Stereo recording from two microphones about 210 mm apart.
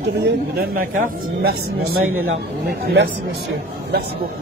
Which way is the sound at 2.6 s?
50° right (ahead or behind).